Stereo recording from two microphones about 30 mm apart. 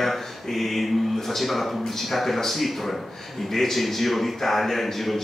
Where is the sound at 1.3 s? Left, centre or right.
Centre.